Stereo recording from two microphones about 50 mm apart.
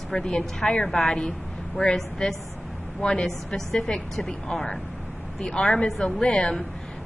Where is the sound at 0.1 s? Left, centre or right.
Centre.